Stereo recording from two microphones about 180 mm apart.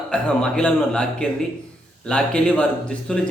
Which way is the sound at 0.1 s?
5° left (ahead or behind).